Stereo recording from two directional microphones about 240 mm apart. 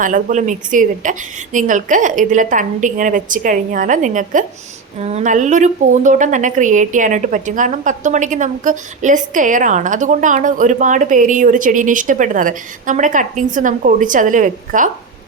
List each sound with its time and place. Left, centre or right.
0.0 s a woman's voice: right